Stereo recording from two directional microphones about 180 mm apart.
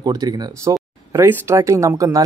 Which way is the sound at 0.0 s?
20° right (ahead or behind).